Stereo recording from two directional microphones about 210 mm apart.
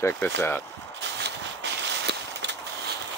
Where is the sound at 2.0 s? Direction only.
55° right (ahead or behind).